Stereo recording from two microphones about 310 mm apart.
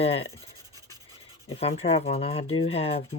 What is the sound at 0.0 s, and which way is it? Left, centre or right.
Speech, centre.